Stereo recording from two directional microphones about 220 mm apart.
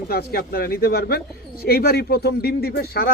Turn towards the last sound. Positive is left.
turn(degrees=45)  # may be behind; listen again after turning